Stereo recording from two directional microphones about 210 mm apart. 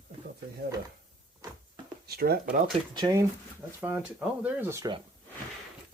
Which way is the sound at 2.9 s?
20° right (ahead or behind).